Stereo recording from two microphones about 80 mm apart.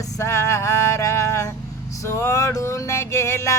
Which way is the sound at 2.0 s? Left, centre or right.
Left.